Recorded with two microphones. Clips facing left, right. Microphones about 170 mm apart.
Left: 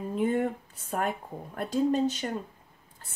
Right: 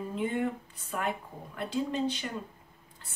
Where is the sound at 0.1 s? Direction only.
45° left (ahead or behind).